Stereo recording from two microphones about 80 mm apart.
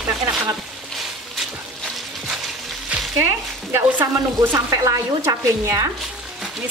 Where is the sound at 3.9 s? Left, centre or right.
Right.